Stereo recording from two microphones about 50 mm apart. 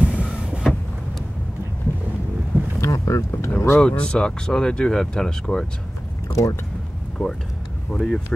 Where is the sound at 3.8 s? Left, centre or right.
Left.